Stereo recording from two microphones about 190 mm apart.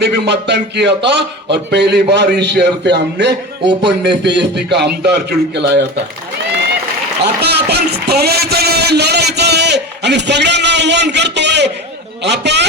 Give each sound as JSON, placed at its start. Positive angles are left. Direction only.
{"t": 0.0, "sound": "a man's voice", "side_deg": -65}
{"t": 7.4, "sound": "a man's voice", "side_deg": -60}